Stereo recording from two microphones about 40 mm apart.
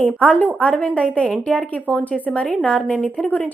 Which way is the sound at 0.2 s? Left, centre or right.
Left.